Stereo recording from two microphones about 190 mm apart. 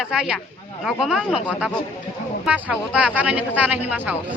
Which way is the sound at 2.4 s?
5° right (ahead or behind).